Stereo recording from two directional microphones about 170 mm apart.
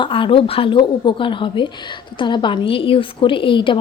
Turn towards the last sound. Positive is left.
turn(degrees=30)  # may be behind; listen again after turning